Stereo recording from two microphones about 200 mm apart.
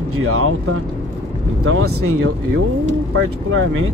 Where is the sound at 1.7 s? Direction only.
90° right.